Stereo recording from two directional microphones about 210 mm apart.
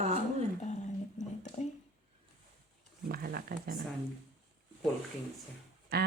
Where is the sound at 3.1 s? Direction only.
45° right (ahead or behind).